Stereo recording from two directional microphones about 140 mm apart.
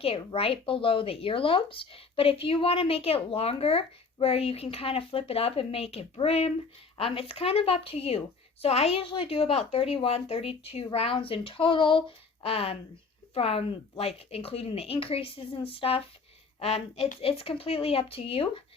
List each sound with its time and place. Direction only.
0.0 s speech: 40° left (ahead or behind)